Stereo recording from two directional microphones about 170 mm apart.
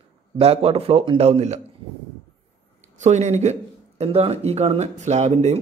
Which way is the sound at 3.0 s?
40° right (ahead or behind).